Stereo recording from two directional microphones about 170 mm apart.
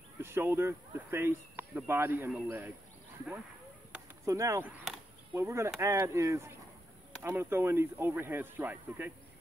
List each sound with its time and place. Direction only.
0.2 s speech: 15° right (ahead or behind)
4.3 s speech: 15° right (ahead or behind)